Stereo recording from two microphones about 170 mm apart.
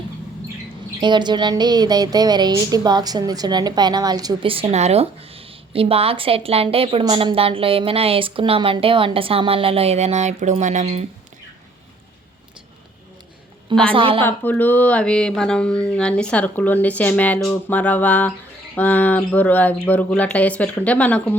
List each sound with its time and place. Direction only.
1.0 s a woman's voice: 25° right (ahead or behind); by 11.0 s 40° right (ahead or behind)
13.9 s a woman's voice: 30° right (ahead or behind)
14.2 s speech: 10° left (ahead or behind)